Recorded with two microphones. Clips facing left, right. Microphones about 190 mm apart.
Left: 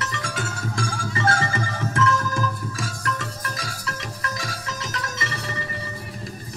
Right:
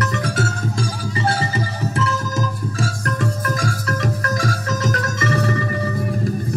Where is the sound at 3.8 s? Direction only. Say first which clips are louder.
Right 9 dB; 45° right (ahead or behind).